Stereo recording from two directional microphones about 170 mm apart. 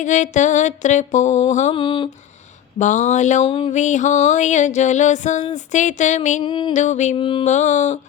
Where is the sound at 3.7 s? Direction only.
45° left (ahead or behind).